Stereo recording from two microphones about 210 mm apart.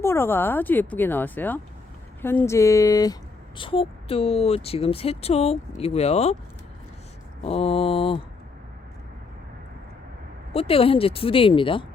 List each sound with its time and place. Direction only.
0.0 s speech: 10° left (ahead or behind); by 6.3 s 30° left (ahead or behind)
7.4 s speech: 30° left (ahead or behind)
10.5 s speech: 25° left (ahead or behind)